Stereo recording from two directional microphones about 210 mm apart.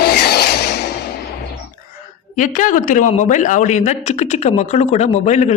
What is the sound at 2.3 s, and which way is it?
A man's voice, 40° left (ahead or behind).